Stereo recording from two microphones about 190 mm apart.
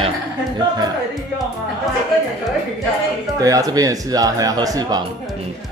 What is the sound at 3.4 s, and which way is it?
Speech, 20° right (ahead or behind).